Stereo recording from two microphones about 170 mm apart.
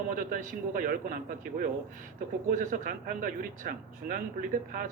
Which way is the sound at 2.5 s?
55° right (ahead or behind).